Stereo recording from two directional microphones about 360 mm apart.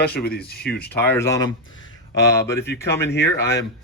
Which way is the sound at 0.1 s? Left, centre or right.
Left.